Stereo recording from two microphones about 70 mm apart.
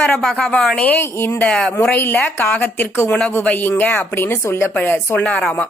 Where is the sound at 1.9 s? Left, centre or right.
Left.